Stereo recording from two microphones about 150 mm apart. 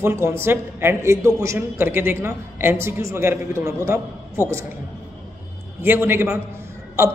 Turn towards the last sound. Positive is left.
turn(degrees=-15)  # may be behind; listen again after turning